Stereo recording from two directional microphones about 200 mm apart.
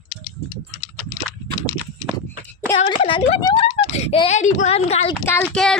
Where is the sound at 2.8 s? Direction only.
25° left (ahead or behind).